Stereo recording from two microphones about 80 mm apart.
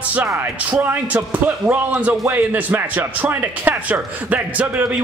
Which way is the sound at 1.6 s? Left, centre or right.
Right.